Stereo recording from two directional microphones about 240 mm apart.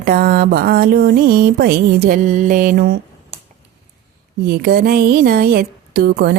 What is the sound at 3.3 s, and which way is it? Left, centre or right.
Finger snapping, right.